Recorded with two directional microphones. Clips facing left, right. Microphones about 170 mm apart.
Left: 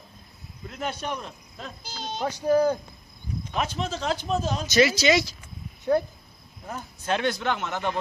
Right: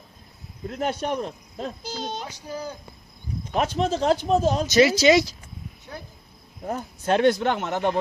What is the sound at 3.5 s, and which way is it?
Speech, 50° right (ahead or behind).